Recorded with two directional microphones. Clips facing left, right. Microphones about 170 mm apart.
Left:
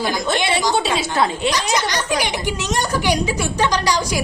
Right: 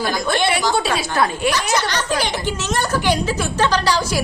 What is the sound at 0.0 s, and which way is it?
A woman's voice, 20° left (ahead or behind).